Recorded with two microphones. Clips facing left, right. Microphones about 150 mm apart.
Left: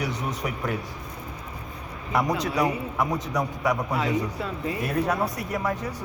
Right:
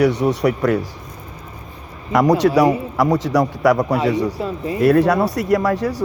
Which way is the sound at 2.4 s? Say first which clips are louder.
Right 11 dB; 80° right.